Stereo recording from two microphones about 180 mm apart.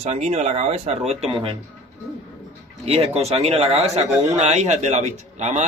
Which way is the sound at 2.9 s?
35° right (ahead or behind).